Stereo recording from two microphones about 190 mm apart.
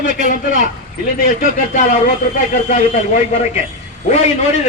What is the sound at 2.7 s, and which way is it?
Speech, 40° left (ahead or behind).